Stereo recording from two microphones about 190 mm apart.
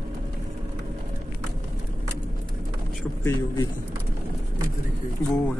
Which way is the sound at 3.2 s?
15° left (ahead or behind).